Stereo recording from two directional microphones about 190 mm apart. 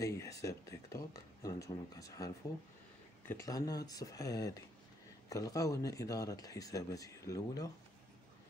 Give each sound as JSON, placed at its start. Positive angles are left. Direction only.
{"t": 0.0, "sound": "speech", "side_deg": 15}